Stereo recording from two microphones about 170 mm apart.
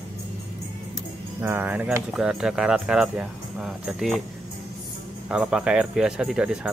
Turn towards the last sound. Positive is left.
turn(degrees=-5)  # may be behind; listen again after turning